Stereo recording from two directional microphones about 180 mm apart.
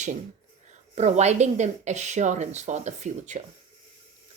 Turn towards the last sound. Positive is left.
turn(degrees=-40)  # may be behind; listen again after turning